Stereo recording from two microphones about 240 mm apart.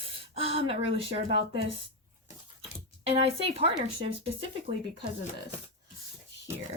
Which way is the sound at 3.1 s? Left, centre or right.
Right.